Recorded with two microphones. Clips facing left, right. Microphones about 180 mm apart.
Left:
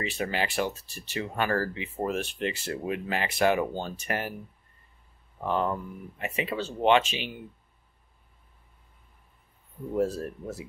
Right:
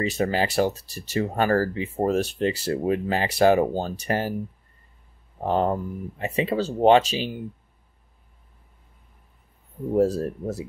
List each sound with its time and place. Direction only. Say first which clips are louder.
0.0 s speech: right 7 dB; 40° right (ahead or behind)
5.4 s speech: right 5 dB; 35° right (ahead or behind)
9.9 s speech: right 6 dB; 35° right (ahead or behind)